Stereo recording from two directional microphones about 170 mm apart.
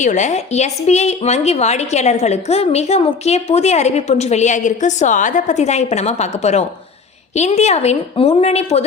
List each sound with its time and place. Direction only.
0.0 s a woman's voice: 45° left (ahead or behind)